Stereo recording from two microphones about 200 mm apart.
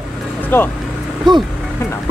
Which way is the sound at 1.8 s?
15° left (ahead or behind).